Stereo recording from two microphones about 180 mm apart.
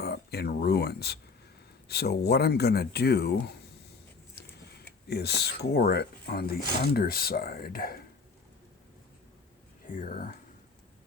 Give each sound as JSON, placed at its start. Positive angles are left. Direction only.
{"t": 0.0, "sound": "speech", "side_deg": 65}
{"t": 5.0, "sound": "speech", "side_deg": 65}
{"t": 9.8, "sound": "speech", "side_deg": 45}